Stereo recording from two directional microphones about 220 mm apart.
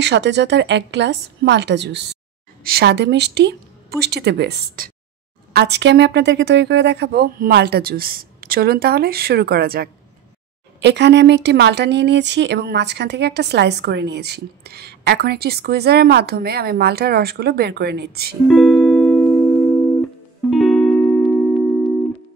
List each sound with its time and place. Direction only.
0.0 s speech: 50° right (ahead or behind)
18.5 s music: centre (ahead or behind)